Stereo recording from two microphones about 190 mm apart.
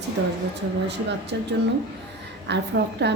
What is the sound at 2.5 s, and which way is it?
Speech, 65° right (ahead or behind).